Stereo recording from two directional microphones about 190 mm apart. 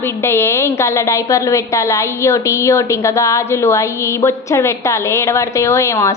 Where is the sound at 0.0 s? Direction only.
15° left (ahead or behind).